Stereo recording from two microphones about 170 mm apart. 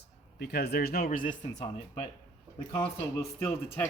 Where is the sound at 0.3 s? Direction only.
75° left (ahead or behind); by 1.6 s 50° left (ahead or behind).